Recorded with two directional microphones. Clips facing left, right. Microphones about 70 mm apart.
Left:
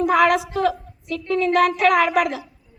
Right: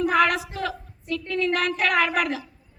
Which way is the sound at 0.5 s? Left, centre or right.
Left.